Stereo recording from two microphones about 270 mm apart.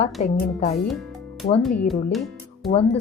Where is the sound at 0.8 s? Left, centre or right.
Centre.